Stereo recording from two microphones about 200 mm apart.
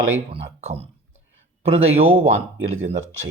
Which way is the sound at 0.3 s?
30° right (ahead or behind).